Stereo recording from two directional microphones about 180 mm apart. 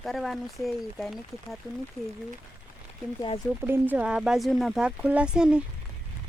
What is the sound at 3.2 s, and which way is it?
Speech, 25° left (ahead or behind).